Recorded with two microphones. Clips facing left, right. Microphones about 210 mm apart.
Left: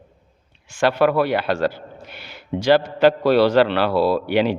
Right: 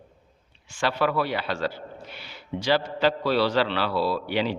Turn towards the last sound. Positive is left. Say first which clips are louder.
# left 7 dB
turn(degrees=60)  # may be behind; listen again after turning